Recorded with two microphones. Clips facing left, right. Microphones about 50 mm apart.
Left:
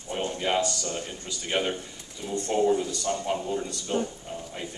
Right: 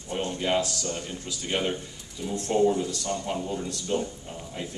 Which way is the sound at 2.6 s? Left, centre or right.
Centre.